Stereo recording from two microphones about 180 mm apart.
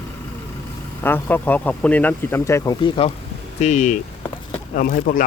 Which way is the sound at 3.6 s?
40° left (ahead or behind).